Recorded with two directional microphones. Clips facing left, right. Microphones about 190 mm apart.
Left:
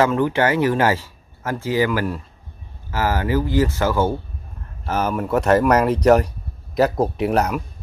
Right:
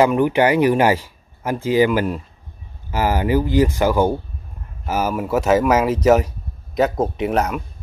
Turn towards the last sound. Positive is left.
turn(degrees=0)  # may be behind; listen again after turning